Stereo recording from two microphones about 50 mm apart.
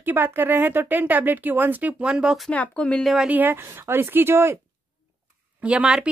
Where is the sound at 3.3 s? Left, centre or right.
Right.